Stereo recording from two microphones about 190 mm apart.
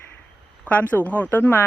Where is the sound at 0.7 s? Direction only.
10° left (ahead or behind).